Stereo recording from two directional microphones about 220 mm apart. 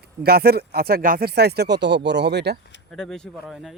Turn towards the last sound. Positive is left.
turn(degrees=0)  # may be behind; listen again after turning